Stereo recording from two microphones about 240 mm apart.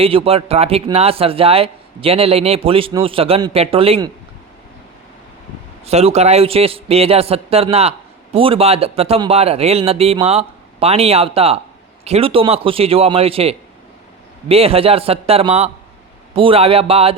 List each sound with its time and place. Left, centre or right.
0.0 s a man's voice: right
5.8 s a man's voice: right